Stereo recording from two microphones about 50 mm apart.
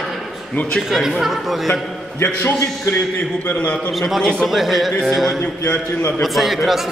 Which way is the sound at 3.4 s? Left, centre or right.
Left.